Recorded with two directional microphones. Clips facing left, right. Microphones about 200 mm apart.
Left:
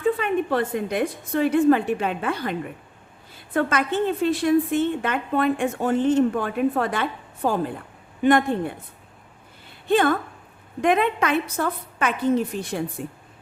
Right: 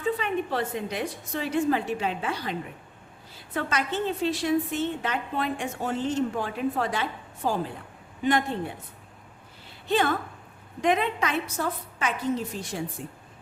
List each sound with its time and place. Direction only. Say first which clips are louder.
0.0 s a woman's voice: left 5 dB; 55° left (ahead or behind)
9.8 s a woman's voice: left 5 dB; 55° left (ahead or behind)